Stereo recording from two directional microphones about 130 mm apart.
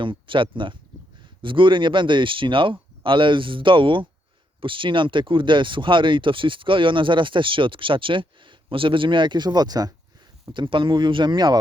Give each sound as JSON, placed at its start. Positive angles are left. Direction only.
{"t": 0.0, "sound": "speech", "side_deg": -40}